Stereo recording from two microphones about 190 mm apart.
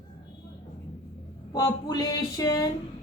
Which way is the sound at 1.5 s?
20° left (ahead or behind).